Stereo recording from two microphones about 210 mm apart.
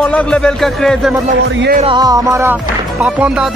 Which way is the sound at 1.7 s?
25° right (ahead or behind).